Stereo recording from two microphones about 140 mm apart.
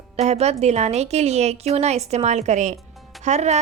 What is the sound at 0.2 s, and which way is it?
A woman's voice, 50° right (ahead or behind).